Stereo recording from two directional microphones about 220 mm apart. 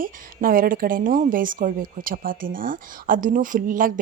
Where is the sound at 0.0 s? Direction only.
40° right (ahead or behind).